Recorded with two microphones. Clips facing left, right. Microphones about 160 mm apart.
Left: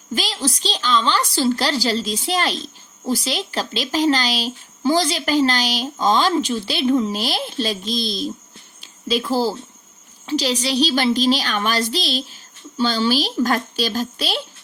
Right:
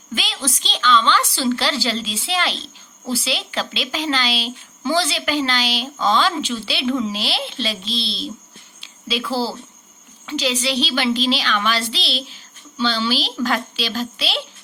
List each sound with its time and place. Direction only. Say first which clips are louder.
0.1 s a sound: left 4 dB; 40° left (ahead or behind)
0.4 s a woman's voice: right 3 dB; 35° left (ahead or behind)
8.8 s cricket: left 4 dB; 45° left (ahead or behind)
10.2 s speech: left 1 dB; 35° left (ahead or behind)